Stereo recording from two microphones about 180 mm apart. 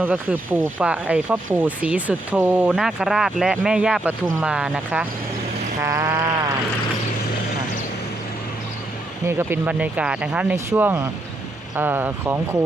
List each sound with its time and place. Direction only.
0.0 s speech: 10° right (ahead or behind)
5.8 s speech: 15° right (ahead or behind)
9.2 s speech: 15° right (ahead or behind)